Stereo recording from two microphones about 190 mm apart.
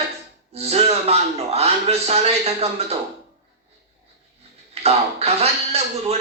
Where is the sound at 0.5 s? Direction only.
35° right (ahead or behind).